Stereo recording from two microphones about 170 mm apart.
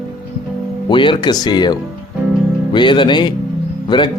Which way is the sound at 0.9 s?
30° left (ahead or behind).